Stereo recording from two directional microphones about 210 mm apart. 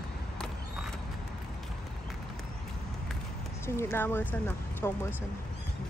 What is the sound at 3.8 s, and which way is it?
Speech, 10° left (ahead or behind).